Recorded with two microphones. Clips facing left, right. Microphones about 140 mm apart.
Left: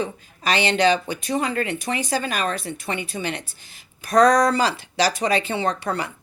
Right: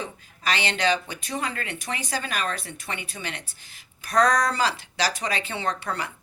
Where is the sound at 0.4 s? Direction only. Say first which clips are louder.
Left 6 dB; 25° left (ahead or behind).